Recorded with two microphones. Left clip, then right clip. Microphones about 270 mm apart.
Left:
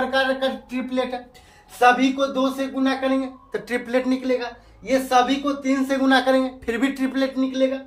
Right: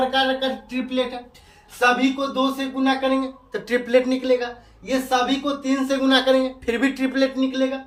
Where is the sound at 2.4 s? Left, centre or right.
Centre.